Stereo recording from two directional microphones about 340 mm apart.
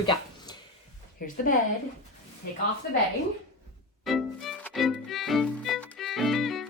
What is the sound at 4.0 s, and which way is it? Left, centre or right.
Music, centre.